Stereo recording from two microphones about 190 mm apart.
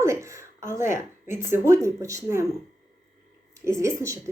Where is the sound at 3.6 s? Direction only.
15° right (ahead or behind).